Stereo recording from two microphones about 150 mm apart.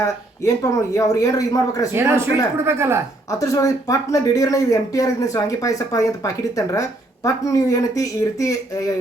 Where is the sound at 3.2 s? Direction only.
20° left (ahead or behind).